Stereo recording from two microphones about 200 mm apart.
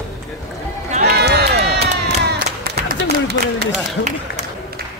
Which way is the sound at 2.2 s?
50° right (ahead or behind).